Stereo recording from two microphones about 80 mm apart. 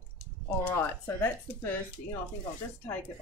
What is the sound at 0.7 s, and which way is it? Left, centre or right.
Speech, left.